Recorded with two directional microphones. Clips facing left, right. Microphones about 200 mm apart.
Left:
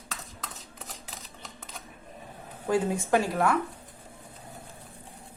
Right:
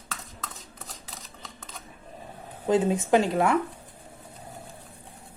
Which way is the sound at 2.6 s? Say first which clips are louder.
Right 3 dB; 20° right (ahead or behind).